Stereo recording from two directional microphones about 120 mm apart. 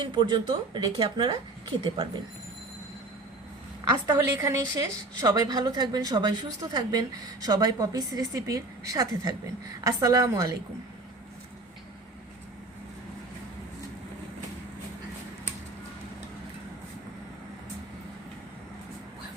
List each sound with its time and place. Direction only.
0.0 s a woman's voice: 40° right (ahead or behind)
4.0 s a woman's voice: 30° right (ahead or behind)